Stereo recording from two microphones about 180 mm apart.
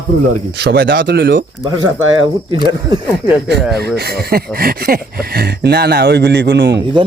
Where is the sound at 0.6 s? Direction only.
70° right (ahead or behind).